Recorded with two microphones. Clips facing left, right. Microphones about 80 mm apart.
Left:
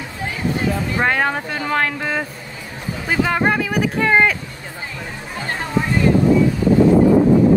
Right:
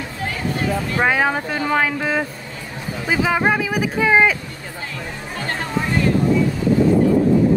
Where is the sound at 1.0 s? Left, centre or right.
Centre.